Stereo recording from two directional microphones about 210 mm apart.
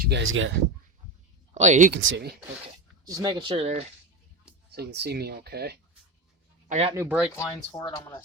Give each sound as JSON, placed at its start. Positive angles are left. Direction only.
{"t": 0.0, "sound": "speech", "side_deg": -60}
{"t": 1.5, "sound": "speech", "side_deg": -35}
{"t": 1.9, "sound": "speech", "side_deg": -60}
{"t": 3.0, "sound": "speech", "side_deg": -15}
{"t": 4.7, "sound": "speech", "side_deg": -50}
{"t": 6.7, "sound": "speech", "side_deg": -30}
{"t": 6.9, "sound": "speech", "side_deg": -10}
{"t": 7.3, "sound": "speech", "side_deg": 20}